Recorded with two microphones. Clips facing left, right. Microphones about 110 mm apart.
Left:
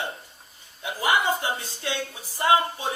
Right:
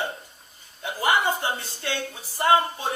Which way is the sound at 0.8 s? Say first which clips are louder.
Right 1 dB; 35° right (ahead or behind).